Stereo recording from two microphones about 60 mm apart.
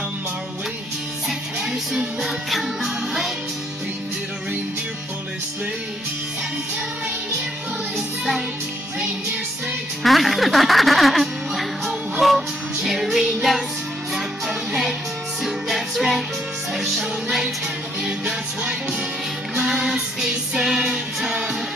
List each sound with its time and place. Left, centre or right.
1.6 s music: centre
10.0 s speech: centre
12.2 s music: centre
14.7 s music: centre
18.0 s music: centre